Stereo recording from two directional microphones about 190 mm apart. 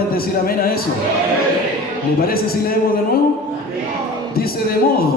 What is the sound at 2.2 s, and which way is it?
Speech, 50° left (ahead or behind).